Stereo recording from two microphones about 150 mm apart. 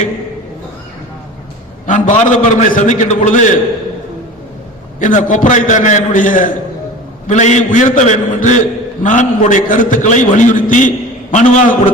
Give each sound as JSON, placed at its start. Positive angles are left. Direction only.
{"t": 1.9, "sound": "a man's voice", "side_deg": 55}
{"t": 4.9, "sound": "a man's voice", "side_deg": 55}